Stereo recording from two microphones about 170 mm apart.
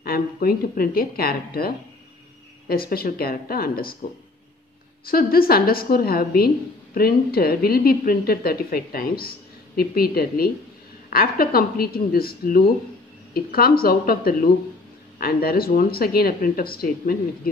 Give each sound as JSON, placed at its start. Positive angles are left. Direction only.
{"t": 0.0, "sound": "a woman's voice", "side_deg": 60}
{"t": 5.0, "sound": "a woman's voice", "side_deg": 60}